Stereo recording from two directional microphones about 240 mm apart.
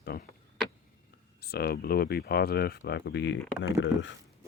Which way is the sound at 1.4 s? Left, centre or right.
Left.